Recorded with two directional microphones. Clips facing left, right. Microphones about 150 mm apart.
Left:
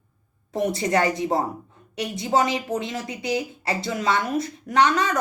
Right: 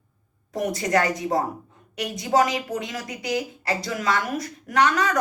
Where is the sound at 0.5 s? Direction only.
25° left (ahead or behind).